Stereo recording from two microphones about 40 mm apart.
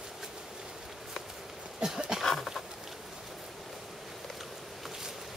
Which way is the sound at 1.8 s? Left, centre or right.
Centre.